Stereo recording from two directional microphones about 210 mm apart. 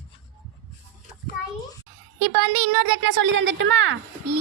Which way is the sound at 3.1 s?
60° right (ahead or behind).